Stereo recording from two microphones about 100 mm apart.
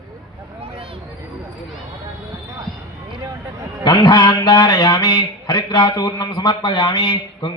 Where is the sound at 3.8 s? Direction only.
45° left (ahead or behind).